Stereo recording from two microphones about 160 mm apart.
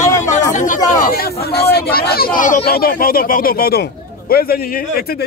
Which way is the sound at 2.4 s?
65° left (ahead or behind).